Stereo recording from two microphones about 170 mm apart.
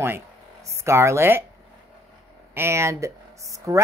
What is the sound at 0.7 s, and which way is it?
Speech, 15° right (ahead or behind).